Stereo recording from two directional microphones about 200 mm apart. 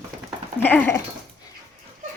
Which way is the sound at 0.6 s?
10° left (ahead or behind).